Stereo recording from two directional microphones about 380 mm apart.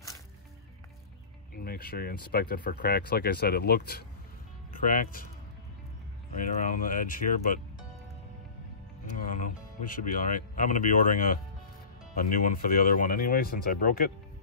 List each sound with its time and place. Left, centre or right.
1.5 s speech: left
6.3 s speech: centre
9.2 s speech: centre